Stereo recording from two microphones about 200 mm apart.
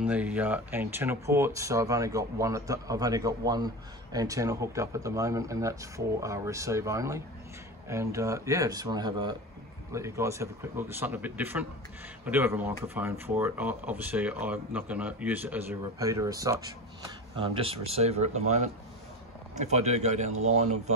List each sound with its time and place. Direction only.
0.0 s speech: 5° right (ahead or behind)
17.4 s speech: 25° right (ahead or behind)